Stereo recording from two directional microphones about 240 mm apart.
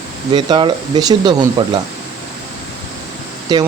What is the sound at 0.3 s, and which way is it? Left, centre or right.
Speech, centre.